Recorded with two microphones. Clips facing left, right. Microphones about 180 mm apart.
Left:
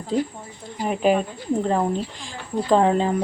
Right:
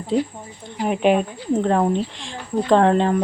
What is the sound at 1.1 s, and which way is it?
Speech, 15° right (ahead or behind).